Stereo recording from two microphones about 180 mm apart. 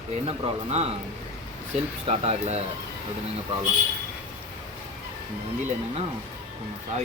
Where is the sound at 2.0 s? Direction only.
35° right (ahead or behind).